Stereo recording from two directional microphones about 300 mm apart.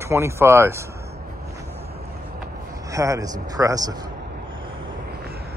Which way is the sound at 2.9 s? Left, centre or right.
Centre.